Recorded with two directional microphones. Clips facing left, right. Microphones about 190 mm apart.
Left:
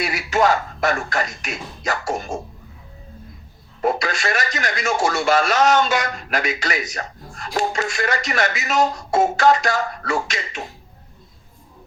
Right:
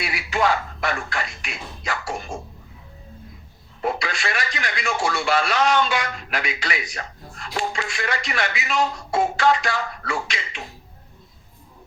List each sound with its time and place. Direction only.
0.0 s speech: 40° left (ahead or behind)
3.8 s speech: 45° left (ahead or behind)